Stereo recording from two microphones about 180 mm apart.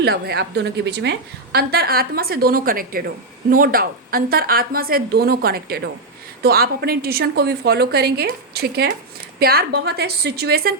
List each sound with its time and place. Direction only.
0.0 s a woman's voice: 60° right (ahead or behind)
1.5 s a woman's voice: 60° right (ahead or behind)